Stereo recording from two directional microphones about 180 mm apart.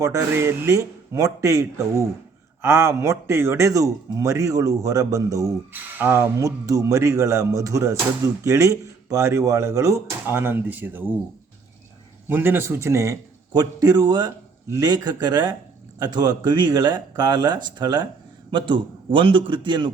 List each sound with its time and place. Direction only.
0.0 s speech: 15° right (ahead or behind)
12.3 s a man's voice: 10° right (ahead or behind)